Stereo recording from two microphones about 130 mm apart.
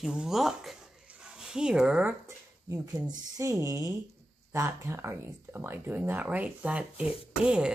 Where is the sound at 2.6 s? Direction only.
20° right (ahead or behind).